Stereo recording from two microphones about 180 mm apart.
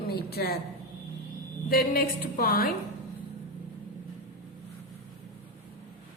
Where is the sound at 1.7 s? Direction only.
55° left (ahead or behind).